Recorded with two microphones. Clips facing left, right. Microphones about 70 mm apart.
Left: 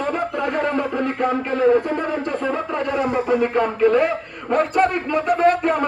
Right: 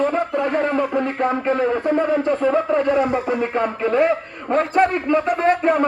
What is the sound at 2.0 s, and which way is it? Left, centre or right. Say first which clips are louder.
A man's voice: right 5 dB; right.